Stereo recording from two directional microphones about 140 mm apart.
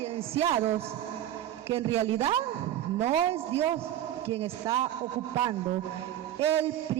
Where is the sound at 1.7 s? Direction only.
45° right (ahead or behind).